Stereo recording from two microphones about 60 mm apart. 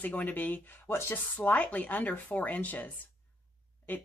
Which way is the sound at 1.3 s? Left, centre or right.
Left.